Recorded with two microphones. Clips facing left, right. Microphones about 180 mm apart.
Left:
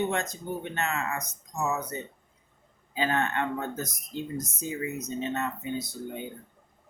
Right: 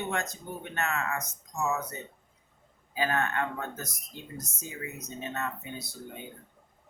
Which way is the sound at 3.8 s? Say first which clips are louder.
Left 9 dB; centre (ahead or behind).